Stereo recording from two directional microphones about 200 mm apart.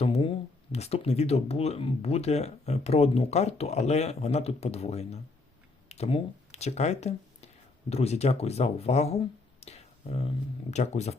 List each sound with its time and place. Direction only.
0.0 s speech: 30° left (ahead or behind)